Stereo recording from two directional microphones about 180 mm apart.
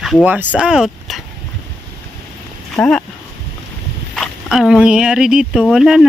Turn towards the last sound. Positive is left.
turn(degrees=0)  # may be behind; listen again after turning